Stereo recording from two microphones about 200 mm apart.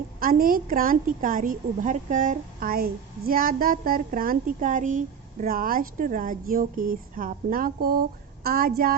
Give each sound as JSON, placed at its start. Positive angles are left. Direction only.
{"t": 0.2, "sound": "a woman's voice", "side_deg": -45}